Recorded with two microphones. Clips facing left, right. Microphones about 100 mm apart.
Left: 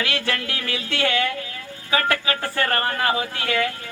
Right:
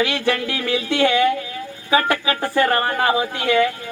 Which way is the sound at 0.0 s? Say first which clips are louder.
Right 6 dB; 20° right (ahead or behind).